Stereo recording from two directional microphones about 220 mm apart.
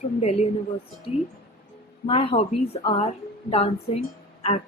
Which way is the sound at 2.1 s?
25° left (ahead or behind).